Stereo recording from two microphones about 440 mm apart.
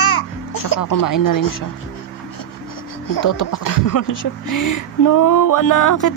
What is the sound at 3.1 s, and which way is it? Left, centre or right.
Speech, left.